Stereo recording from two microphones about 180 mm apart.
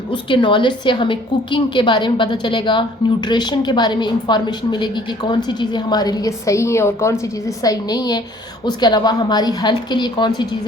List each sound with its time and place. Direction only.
0.1 s a woman's voice: 25° left (ahead or behind)